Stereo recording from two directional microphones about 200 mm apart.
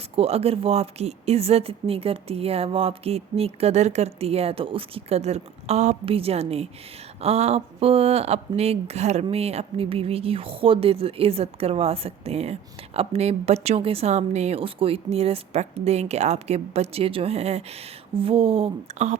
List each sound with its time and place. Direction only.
0.2 s speech: 30° right (ahead or behind)